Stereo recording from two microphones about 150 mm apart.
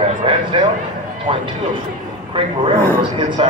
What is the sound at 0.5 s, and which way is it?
Speech, 35° right (ahead or behind).